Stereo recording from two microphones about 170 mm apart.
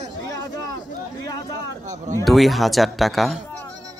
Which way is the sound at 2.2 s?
Centre (ahead or behind).